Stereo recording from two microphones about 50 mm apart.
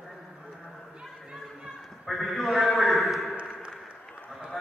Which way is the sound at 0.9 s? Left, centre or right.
Centre.